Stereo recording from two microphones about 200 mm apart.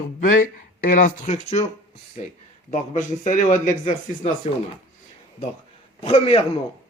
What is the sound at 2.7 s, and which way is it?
A man's voice, 40° left (ahead or behind).